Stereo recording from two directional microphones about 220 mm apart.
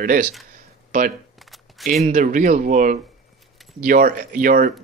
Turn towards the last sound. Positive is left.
turn(degrees=-40)  # may be behind; listen again after turning